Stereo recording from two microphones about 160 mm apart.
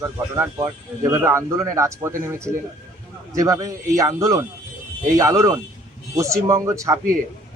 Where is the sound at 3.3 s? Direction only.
20° right (ahead or behind).